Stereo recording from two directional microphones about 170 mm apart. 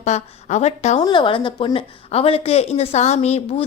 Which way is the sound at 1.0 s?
30° left (ahead or behind).